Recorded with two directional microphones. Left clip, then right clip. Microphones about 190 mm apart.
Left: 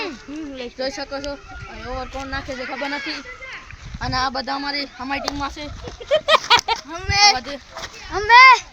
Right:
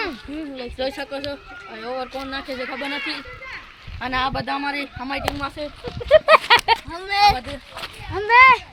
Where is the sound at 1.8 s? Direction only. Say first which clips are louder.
Right 1 dB; 50° right (ahead or behind).